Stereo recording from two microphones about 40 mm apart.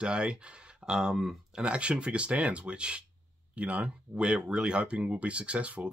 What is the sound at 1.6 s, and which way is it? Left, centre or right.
Speech, right.